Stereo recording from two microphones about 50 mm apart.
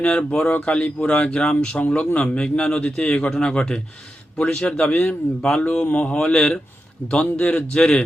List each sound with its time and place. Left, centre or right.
0.0 s a man's voice: left
7.7 s a man's voice: centre